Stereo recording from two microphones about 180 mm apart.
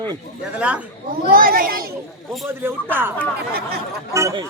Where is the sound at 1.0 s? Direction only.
50° right (ahead or behind).